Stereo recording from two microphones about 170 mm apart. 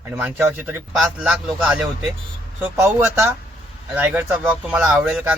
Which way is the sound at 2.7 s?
15° right (ahead or behind).